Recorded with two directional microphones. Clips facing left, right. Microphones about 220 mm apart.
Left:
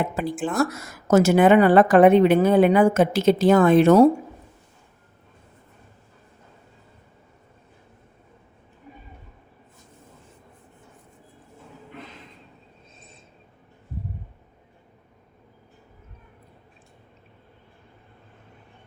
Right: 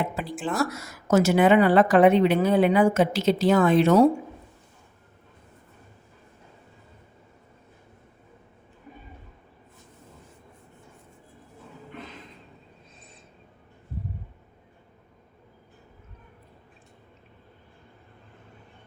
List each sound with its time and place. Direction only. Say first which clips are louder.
0.0 s a woman's voice: left 4 dB; 45° left (ahead or behind)